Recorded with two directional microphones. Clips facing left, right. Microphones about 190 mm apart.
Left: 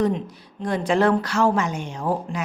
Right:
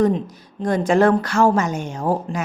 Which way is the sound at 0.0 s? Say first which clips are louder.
Right 4 dB; 45° right (ahead or behind).